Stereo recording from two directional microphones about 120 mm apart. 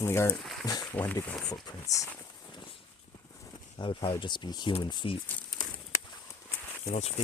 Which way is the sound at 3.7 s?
45° left (ahead or behind).